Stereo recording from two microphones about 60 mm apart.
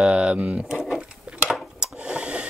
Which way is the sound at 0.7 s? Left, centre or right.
Centre.